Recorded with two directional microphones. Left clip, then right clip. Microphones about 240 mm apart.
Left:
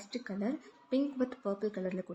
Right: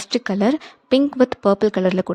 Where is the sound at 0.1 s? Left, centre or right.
Right.